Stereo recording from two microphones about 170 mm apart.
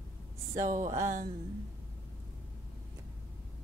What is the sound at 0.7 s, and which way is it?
Speech, 50° right (ahead or behind).